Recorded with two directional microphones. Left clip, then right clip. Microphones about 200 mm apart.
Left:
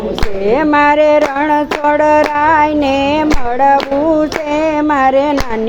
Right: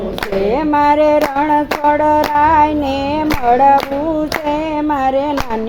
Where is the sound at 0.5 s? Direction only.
15° left (ahead or behind).